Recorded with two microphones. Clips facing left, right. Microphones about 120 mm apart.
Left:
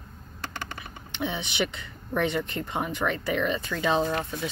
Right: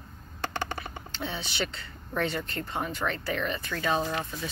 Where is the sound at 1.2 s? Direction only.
20° left (ahead or behind).